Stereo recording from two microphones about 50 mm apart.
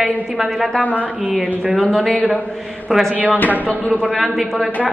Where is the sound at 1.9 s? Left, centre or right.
Centre.